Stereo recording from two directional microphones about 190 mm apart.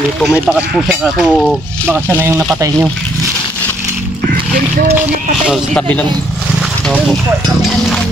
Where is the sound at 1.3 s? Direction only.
5° left (ahead or behind).